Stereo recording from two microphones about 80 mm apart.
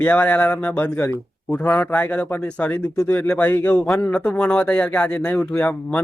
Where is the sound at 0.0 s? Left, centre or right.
Centre.